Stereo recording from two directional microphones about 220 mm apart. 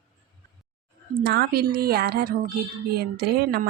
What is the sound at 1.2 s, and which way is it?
Speech, 45° right (ahead or behind).